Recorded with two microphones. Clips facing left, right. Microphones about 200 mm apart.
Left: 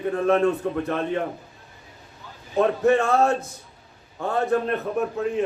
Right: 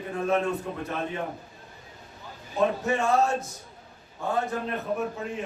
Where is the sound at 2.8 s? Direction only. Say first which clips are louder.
Left 5 dB; 60° left (ahead or behind).